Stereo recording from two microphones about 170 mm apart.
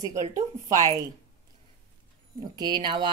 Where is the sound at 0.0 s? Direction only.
45° right (ahead or behind).